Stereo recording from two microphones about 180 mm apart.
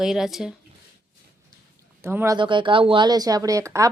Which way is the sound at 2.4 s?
25° right (ahead or behind).